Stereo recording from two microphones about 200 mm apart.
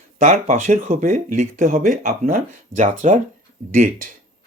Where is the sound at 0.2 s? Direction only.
40° right (ahead or behind).